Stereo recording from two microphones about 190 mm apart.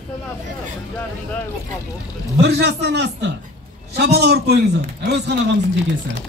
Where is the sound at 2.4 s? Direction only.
60° right (ahead or behind).